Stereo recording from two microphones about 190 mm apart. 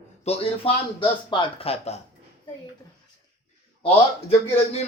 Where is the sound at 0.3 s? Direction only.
30° left (ahead or behind).